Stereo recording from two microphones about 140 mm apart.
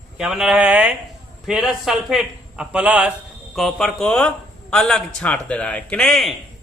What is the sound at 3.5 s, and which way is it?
Speech, centre (ahead or behind).